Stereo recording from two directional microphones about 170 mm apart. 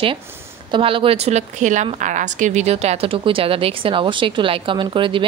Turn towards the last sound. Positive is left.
turn(degrees=-30)  # may be behind; listen again after turning